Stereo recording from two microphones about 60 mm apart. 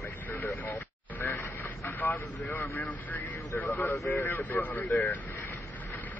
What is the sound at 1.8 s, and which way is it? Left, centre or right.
Speech, left.